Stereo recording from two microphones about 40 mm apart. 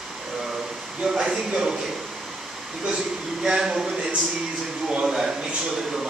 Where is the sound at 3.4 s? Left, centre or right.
Centre.